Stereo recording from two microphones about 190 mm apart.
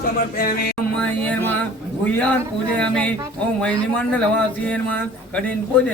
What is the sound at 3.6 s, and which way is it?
Speech, 5° left (ahead or behind).